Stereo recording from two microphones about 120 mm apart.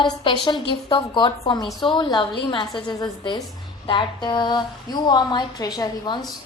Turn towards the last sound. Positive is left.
turn(degrees=35)  # may be behind; listen again after turning